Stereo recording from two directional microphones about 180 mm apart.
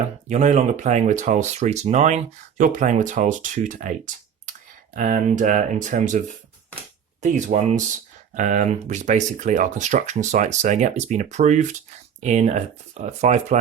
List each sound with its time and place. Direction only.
0.3 s speech: 40° right (ahead or behind)